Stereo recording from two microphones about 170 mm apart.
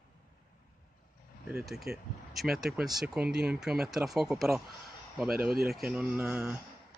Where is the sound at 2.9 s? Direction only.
5° right (ahead or behind).